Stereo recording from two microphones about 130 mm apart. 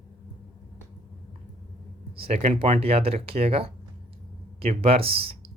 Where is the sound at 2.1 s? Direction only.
50° right (ahead or behind).